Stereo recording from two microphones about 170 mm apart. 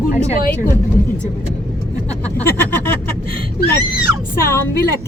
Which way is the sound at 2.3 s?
10° left (ahead or behind).